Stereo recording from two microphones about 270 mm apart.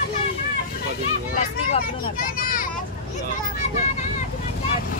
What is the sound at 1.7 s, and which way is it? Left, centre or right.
Speech, left.